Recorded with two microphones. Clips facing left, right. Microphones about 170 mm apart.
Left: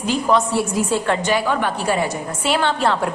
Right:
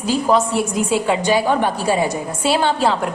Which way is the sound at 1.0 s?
10° right (ahead or behind).